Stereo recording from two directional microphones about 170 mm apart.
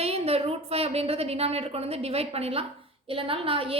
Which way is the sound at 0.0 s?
35° right (ahead or behind).